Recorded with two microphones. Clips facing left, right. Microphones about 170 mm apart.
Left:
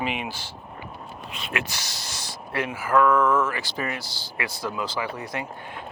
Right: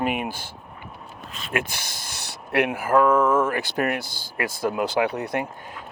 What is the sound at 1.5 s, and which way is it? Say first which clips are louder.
Speech: right 5 dB; 55° right (ahead or behind).